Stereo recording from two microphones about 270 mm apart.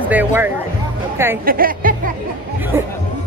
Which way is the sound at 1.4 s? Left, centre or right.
Right.